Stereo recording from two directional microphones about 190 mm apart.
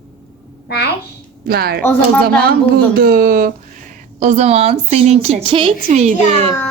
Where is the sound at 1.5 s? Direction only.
55° right (ahead or behind).